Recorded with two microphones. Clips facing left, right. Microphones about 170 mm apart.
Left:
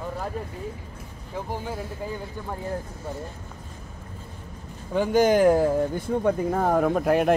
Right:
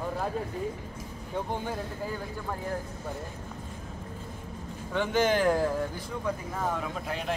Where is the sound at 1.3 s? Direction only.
10° left (ahead or behind).